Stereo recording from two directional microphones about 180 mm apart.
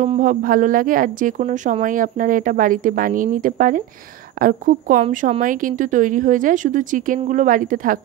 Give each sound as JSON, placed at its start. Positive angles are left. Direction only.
{"t": 0.0, "sound": "speech", "side_deg": -45}